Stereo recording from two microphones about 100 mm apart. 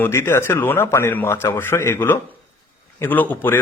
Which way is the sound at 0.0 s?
25° left (ahead or behind).